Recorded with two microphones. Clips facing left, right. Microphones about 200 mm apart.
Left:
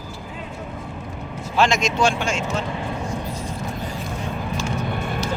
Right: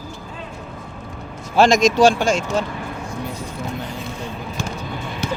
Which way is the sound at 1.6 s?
40° right (ahead or behind).